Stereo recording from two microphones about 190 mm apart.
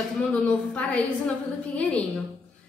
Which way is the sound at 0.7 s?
5° left (ahead or behind).